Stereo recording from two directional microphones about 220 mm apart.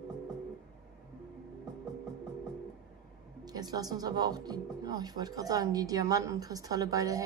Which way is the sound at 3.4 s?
15° right (ahead or behind).